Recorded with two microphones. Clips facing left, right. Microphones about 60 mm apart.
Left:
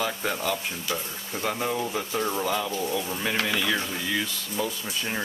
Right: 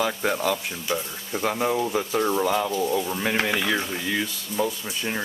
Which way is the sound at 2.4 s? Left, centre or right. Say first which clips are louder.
Right 4 dB; right.